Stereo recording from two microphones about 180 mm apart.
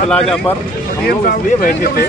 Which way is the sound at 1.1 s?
55° left (ahead or behind).